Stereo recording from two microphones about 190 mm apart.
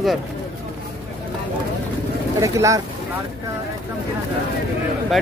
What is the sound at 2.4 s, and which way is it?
Speech, 15° right (ahead or behind).